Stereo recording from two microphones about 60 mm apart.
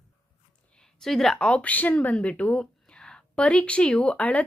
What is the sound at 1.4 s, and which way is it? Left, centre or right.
Speech, left.